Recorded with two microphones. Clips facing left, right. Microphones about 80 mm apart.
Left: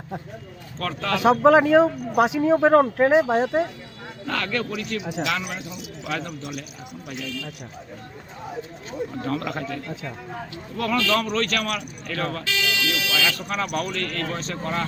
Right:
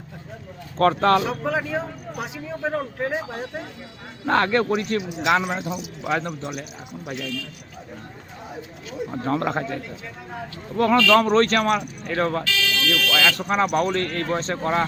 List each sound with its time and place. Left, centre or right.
0.8 s speech: right
1.2 s speech: left
4.3 s a man's voice: right
9.1 s a man's voice: right
12.5 s speech: centre
13.1 s speech: right
13.3 s a man's voice: right